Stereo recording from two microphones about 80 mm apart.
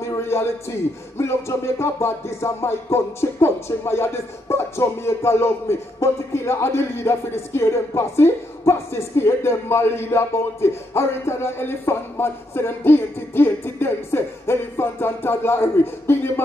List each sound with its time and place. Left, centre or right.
0.0 s speech: left